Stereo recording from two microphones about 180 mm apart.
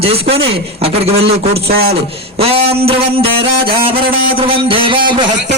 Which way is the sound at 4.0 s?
30° right (ahead or behind).